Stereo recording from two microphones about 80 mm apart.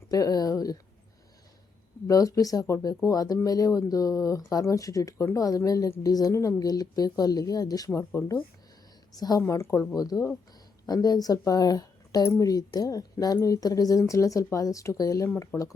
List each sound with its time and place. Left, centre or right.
0.1 s speech: left
2.0 s speech: left
7.9 s speech: left
9.1 s a woman's voice: left
9.5 s speech: left